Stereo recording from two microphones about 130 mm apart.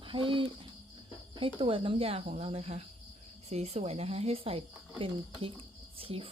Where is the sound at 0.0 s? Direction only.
40° right (ahead or behind).